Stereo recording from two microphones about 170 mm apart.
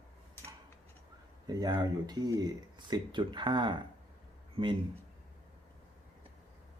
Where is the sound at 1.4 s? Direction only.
25° right (ahead or behind).